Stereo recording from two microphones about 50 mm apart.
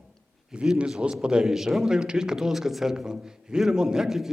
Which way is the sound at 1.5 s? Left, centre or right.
Centre.